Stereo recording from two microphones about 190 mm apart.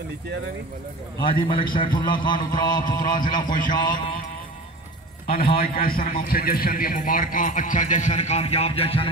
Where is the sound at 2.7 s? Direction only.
45° left (ahead or behind).